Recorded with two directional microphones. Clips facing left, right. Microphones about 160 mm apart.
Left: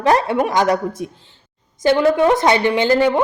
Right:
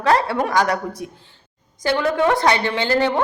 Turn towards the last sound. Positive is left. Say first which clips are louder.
# left 4 dB
turn(degrees=15)  # may be behind; listen again after turning